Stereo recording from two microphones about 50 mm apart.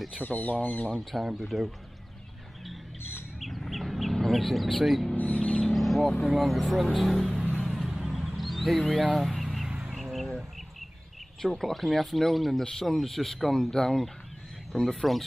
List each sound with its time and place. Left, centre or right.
0.1 s speech: left
0.9 s speech: centre
3.3 s chicken: centre
5.1 s mouse: left
5.8 s vehicle: centre
6.2 s speech: centre
7.8 s vehicle: centre
9.1 s a sound: centre
9.9 s bird: centre
11.4 s speech: centre